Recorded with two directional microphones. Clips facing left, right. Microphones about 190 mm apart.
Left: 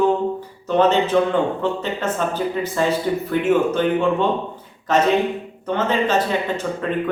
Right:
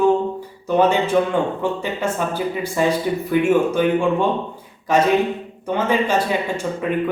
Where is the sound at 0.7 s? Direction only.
10° right (ahead or behind).